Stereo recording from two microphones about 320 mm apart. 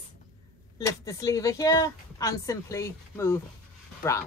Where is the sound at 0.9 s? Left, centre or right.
Centre.